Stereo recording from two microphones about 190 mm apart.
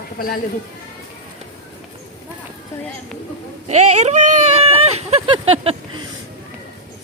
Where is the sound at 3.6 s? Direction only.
35° right (ahead or behind).